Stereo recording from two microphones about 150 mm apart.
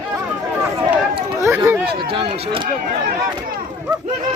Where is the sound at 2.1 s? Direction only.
35° right (ahead or behind).